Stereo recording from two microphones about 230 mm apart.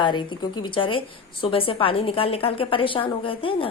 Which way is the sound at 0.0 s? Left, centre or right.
Centre.